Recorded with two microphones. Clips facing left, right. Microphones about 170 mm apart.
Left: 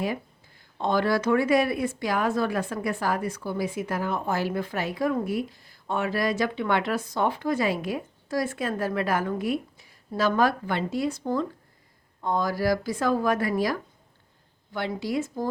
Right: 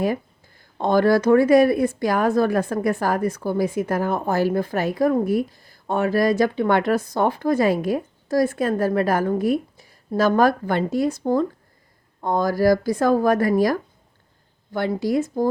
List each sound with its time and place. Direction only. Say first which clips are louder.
0.8 s a woman's voice: right 7 dB; 45° right (ahead or behind)